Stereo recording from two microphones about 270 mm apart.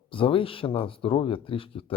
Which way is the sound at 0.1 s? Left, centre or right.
Centre.